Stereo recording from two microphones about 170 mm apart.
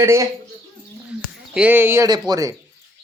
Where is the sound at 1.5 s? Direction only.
10° right (ahead or behind).